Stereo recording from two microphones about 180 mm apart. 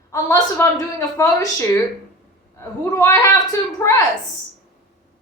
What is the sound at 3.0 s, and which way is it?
Speech, 15° left (ahead or behind).